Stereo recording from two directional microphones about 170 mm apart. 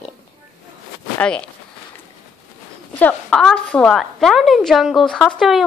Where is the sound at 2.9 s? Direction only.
5° left (ahead or behind).